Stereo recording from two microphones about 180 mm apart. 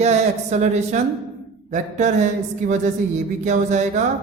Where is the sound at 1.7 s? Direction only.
40° right (ahead or behind).